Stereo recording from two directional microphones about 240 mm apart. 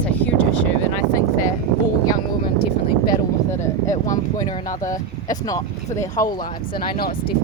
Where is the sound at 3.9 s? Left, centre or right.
Left.